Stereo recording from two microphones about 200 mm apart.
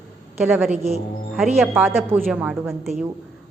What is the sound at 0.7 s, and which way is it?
Speech, 30° right (ahead or behind).